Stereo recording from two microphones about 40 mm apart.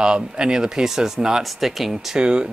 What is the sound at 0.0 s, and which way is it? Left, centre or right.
Speech, centre.